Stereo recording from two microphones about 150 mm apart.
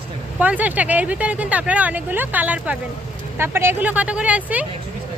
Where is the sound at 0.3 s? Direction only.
10° right (ahead or behind).